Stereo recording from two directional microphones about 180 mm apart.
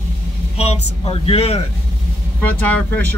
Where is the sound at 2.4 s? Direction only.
10° left (ahead or behind).